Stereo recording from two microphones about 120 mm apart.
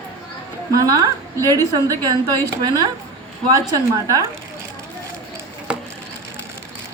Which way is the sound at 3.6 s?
30° right (ahead or behind).